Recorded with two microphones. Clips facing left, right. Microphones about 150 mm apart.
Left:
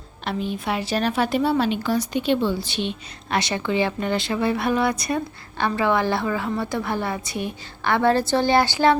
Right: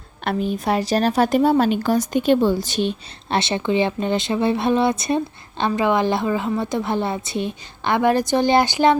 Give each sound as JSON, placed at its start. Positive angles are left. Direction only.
{"t": 0.3, "sound": "a woman's voice", "side_deg": -45}
{"t": 3.2, "sound": "speech", "side_deg": -25}